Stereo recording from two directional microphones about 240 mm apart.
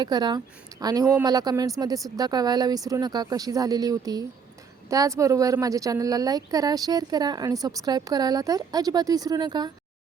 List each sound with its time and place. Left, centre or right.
0.0 s a woman's voice: centre